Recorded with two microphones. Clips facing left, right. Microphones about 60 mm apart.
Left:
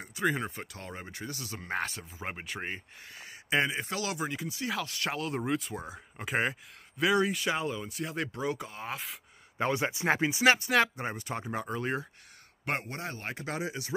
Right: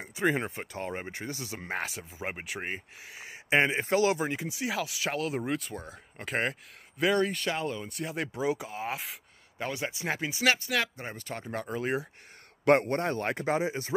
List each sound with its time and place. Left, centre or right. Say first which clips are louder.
0.0 s speech: right 2 dB; right
1.7 s speech: left 2 dB; centre
3.4 s speech: right 4 dB; right
4.6 s speech: right 2 dB; centre
9.6 s speech: left 4 dB; left
11.1 s speech: left 2 dB; centre
11.7 s speech: right 3 dB; centre
12.6 s speech: right 11 dB; right
13.5 s speech: right 5 dB; right